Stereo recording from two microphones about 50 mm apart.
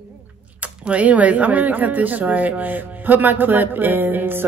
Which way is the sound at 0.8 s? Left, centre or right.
Right.